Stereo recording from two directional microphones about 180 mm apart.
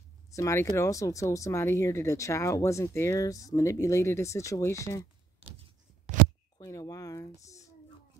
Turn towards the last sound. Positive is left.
turn(degrees=20)  # may be behind; listen again after turning